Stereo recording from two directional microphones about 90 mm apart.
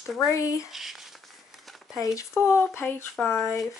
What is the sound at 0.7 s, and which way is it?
Speech, 5° right (ahead or behind).